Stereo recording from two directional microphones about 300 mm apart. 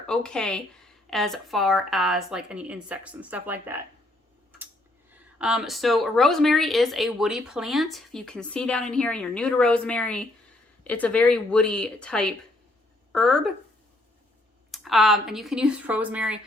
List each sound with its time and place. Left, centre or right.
0.1 s speech: centre
5.4 s speech: centre
14.7 s speech: centre